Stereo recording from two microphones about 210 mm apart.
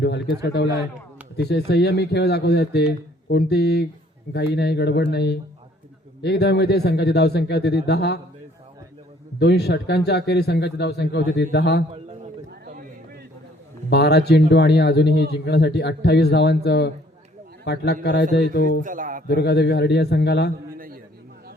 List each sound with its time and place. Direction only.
0.0 s a man's voice: 55° left (ahead or behind)
9.4 s a man's voice: 50° left (ahead or behind)
12.2 s a sound: 40° right (ahead or behind)
13.9 s a man's voice: 50° left (ahead or behind)
18.8 s a man's voice: 40° right (ahead or behind)
19.3 s a man's voice: 50° left (ahead or behind)
20.7 s a sound: 40° right (ahead or behind)